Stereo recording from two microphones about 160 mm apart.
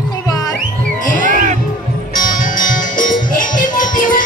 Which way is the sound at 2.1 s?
60° left (ahead or behind).